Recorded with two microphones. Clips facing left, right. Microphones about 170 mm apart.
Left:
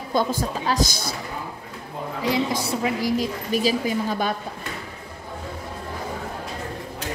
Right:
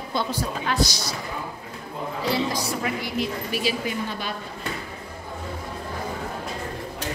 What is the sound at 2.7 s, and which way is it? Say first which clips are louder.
A woman's voice: left 5 dB; 40° left (ahead or behind).